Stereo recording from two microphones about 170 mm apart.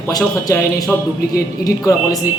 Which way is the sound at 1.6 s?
20° left (ahead or behind).